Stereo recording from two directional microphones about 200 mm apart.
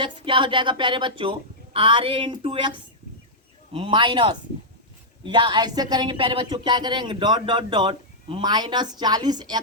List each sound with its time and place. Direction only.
0.0 s speech: 25° right (ahead or behind)